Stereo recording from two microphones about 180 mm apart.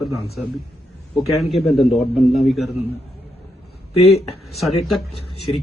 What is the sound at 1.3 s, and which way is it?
Speech, centre (ahead or behind).